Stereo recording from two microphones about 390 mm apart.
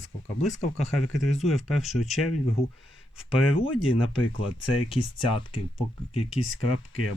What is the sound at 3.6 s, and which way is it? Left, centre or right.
Speech, centre.